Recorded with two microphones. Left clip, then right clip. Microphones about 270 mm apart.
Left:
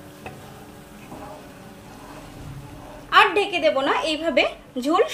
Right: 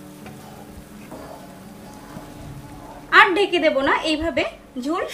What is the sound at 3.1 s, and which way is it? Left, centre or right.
A woman's voice, left.